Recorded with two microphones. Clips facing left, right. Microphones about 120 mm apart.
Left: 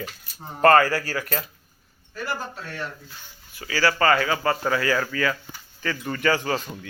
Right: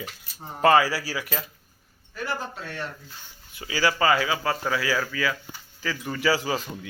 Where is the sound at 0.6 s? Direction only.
5° right (ahead or behind).